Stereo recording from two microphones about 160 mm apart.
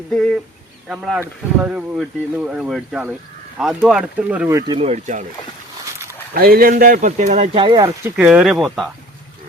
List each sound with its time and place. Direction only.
0.1 s speech: 5° left (ahead or behind)
4.7 s speech: 40° right (ahead or behind)
6.3 s speech: 70° right (ahead or behind); by 7.5 s 50° right (ahead or behind)
7.5 s speech: 30° right (ahead or behind)
8.0 s speech: 10° right (ahead or behind)